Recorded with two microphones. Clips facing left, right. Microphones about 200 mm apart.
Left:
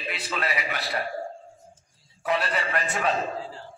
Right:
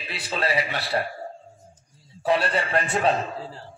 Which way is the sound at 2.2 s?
30° right (ahead or behind).